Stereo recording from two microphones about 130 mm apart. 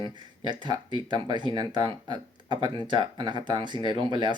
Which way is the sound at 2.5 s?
35° right (ahead or behind).